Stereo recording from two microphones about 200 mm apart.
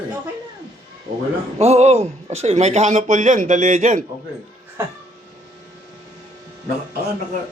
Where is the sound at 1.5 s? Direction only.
30° right (ahead or behind).